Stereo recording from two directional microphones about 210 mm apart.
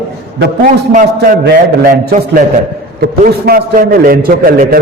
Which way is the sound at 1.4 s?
50° right (ahead or behind).